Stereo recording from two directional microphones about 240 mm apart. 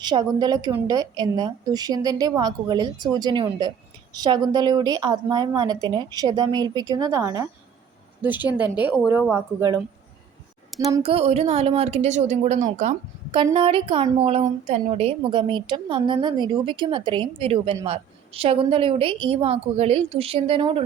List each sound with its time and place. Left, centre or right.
0.0 s a woman's voice: centre
10.9 s a woman's voice: right